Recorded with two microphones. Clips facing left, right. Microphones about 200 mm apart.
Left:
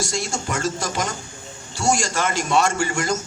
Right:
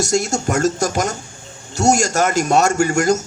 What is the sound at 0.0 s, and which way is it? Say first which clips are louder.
A man's voice: right 8 dB; 45° right (ahead or behind).